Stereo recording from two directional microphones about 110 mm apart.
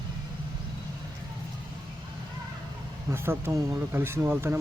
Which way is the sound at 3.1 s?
20° right (ahead or behind).